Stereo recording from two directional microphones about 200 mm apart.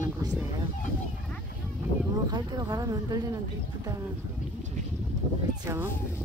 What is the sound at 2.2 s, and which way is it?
Speech, 20° right (ahead or behind).